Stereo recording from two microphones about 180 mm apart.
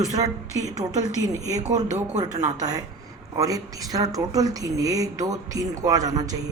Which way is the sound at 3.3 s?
20° right (ahead or behind).